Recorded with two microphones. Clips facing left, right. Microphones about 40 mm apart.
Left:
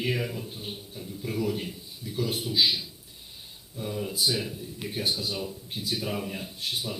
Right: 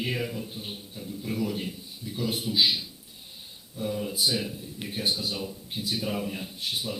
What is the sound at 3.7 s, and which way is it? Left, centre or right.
Speech, centre.